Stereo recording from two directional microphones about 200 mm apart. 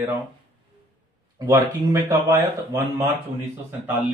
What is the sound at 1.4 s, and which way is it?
Speech, 15° right (ahead or behind).